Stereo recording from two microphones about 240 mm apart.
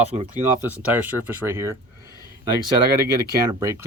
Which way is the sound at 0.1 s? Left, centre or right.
Right.